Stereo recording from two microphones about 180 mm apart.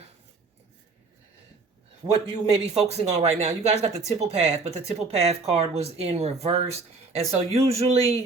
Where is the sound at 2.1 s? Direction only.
35° right (ahead or behind).